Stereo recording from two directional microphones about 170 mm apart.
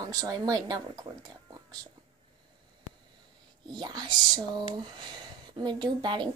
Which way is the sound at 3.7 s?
25° right (ahead or behind).